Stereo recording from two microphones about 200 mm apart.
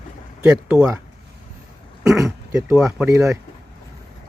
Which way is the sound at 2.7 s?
5° right (ahead or behind).